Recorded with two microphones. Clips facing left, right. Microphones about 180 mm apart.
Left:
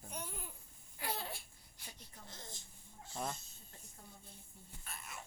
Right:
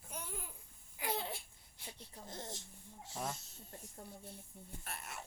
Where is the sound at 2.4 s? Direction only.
85° right.